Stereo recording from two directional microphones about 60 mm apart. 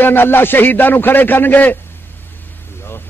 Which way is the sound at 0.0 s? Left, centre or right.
Left.